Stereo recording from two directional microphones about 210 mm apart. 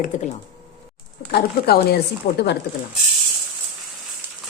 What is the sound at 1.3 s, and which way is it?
Speech, 50° left (ahead or behind).